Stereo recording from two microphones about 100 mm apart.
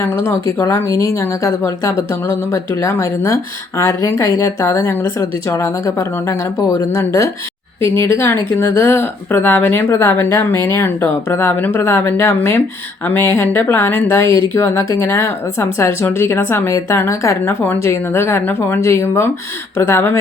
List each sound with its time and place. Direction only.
0.0 s a woman's voice: 20° left (ahead or behind)
14.3 s speech: 55° right (ahead or behind)
14.5 s a woman's voice: 30° left (ahead or behind)